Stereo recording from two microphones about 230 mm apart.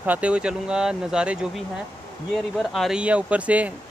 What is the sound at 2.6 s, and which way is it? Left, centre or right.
Speech, centre.